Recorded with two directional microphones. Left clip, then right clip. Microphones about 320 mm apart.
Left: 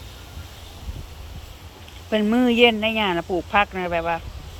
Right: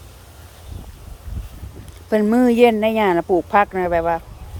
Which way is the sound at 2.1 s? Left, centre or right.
Centre.